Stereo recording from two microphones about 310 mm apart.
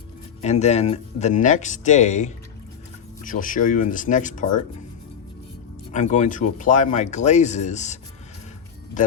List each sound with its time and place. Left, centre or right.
0.4 s speech: left
5.9 s speech: left